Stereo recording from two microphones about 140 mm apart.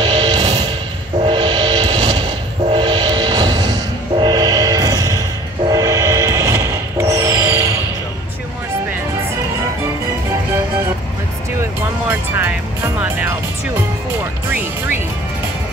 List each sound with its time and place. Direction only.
0.0 s music: 30° right (ahead or behind)
1.2 s train: 35° right (ahead or behind)
5.7 s music: 25° right (ahead or behind)